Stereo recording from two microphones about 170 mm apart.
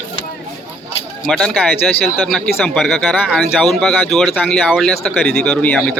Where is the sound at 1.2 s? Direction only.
5° left (ahead or behind).